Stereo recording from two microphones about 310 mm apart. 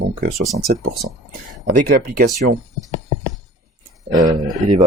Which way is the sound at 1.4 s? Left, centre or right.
Right.